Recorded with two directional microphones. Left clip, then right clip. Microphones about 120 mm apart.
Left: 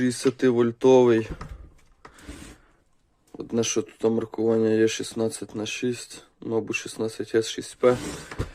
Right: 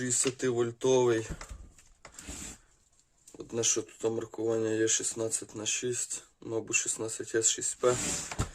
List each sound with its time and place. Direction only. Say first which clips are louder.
0.0 s speech: left 8 dB; 25° left (ahead or behind)
3.3 s speech: left 6 dB; 25° left (ahead or behind)